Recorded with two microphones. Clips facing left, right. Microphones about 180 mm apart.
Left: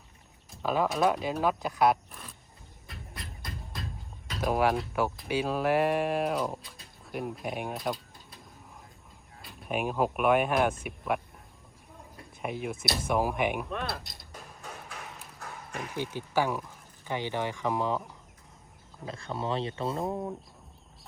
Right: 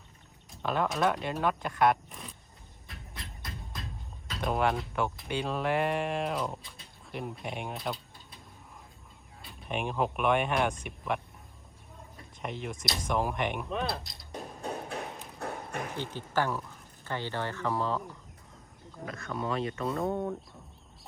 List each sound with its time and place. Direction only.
0.6 s speech: 5° left (ahead or behind)
2.9 s music: centre (ahead or behind)
4.3 s speech: 5° left (ahead or behind)
9.4 s speech: centre (ahead or behind)
12.4 s speech: 5° left (ahead or behind)
14.3 s music: 35° right (ahead or behind)
15.4 s horse: 60° right (ahead or behind)
16.0 s speech: 10° left (ahead or behind)
19.0 s speech: 30° left (ahead or behind)